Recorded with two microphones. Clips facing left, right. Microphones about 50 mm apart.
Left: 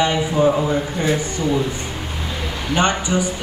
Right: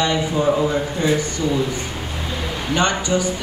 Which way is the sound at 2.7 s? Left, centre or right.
Left.